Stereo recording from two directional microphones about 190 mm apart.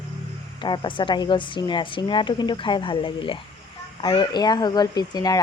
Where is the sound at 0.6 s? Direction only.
25° left (ahead or behind).